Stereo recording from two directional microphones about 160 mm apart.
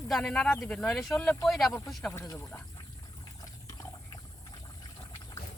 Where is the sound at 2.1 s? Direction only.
15° left (ahead or behind).